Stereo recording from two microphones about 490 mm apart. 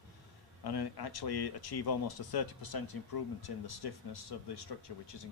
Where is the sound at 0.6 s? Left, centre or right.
Left.